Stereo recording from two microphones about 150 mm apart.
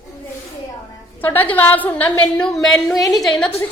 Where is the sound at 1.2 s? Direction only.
10° left (ahead or behind).